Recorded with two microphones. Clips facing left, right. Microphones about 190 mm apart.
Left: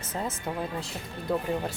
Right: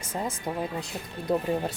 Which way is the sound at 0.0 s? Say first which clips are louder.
Right 1 dB; 10° right (ahead or behind).